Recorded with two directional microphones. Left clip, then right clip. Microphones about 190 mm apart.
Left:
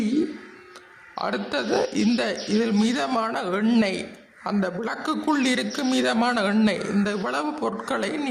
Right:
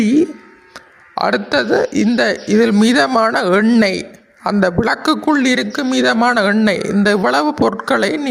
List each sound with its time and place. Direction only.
0.0 s a man's voice: 40° right (ahead or behind)